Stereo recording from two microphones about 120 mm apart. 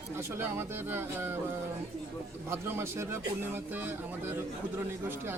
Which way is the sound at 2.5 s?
20° right (ahead or behind).